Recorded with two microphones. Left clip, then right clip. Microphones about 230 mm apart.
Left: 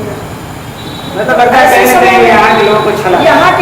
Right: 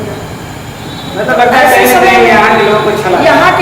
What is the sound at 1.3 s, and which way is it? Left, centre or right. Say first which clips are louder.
A woman's voice: left 1 dB; centre.